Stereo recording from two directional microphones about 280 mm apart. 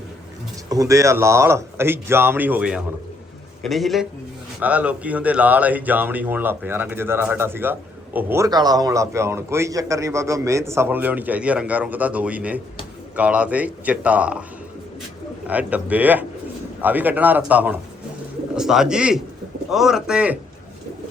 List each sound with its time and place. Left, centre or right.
0.7 s a man's voice: centre
15.4 s a man's voice: centre